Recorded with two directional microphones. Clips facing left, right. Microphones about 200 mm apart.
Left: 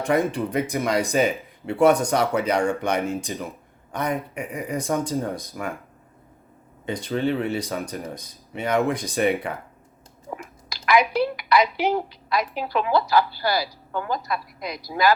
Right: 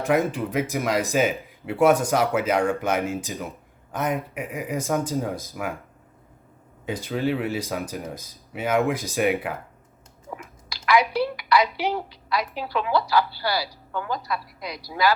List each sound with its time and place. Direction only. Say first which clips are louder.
0.0 s speech: even; centre (ahead or behind)
6.8 s speech: left 1 dB; 5° right (ahead or behind)
10.8 s a sound: left 1 dB; 15° left (ahead or behind)
11.8 s a woman's voice: left 3 dB; 50° left (ahead or behind)